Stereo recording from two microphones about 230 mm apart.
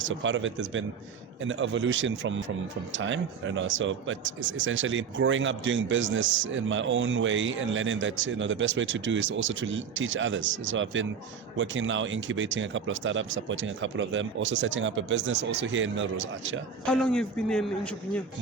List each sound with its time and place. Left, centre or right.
0.1 s speech: right
16.8 s a man's voice: centre